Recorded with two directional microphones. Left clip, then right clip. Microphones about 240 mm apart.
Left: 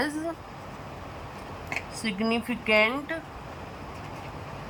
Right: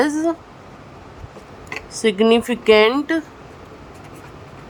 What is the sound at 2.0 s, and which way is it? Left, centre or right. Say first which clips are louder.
Speech: right 15 dB; right.